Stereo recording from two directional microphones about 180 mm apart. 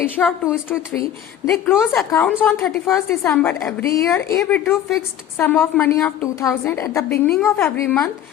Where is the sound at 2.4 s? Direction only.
5° left (ahead or behind).